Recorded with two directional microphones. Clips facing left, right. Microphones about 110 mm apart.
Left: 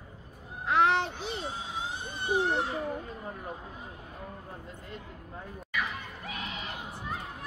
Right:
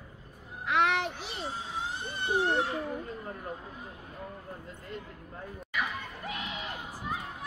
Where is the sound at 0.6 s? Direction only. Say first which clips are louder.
Left 2 dB; 30° left (ahead or behind).